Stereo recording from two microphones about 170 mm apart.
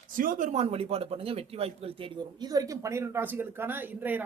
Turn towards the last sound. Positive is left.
turn(degrees=-10)  # may be behind; listen again after turning